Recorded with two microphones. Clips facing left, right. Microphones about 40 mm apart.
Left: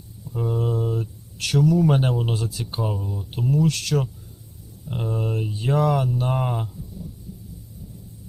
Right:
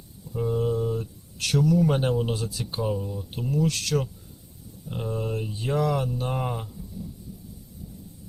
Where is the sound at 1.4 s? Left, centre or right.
Left.